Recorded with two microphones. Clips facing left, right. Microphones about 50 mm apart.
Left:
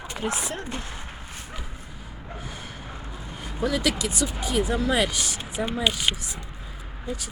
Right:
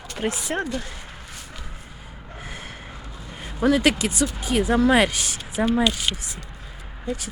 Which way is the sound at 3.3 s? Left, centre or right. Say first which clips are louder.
Right 6 dB; right.